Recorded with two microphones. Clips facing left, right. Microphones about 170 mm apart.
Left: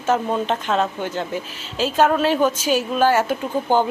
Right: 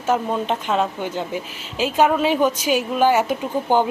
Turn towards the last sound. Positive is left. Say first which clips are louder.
# even
turn(degrees=-15)  # may be behind; listen again after turning